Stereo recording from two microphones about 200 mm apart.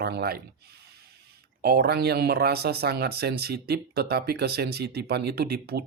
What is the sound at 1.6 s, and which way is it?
Speech, 50° right (ahead or behind).